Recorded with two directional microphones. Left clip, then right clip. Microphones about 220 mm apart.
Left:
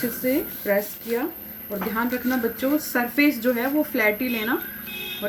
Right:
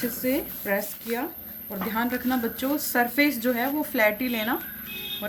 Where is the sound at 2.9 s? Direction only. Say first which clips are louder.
Right 1 dB; 50° right (ahead or behind).